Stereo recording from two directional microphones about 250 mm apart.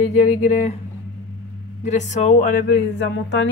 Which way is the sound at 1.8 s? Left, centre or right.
Left.